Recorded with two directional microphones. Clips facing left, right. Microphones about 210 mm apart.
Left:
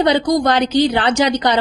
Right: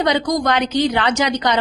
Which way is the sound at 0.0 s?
30° left (ahead or behind).